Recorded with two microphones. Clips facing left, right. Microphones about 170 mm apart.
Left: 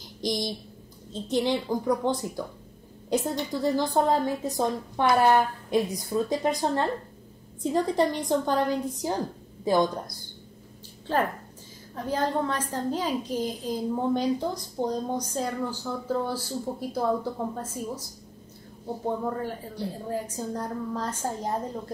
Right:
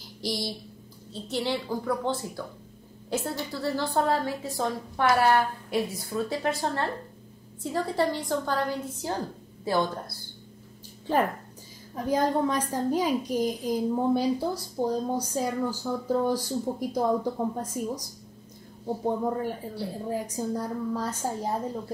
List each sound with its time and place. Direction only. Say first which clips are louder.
0.2 s a child's voice: left 3 dB; 20° left (ahead or behind)
3.5 s a woman's voice: left 3 dB; 15° left (ahead or behind)
11.9 s a woman's voice: right 2 dB; 10° right (ahead or behind)
19.0 s a woman's voice: right 1 dB; 15° right (ahead or behind)